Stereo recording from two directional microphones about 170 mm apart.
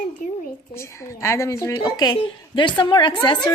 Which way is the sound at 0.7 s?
15° left (ahead or behind).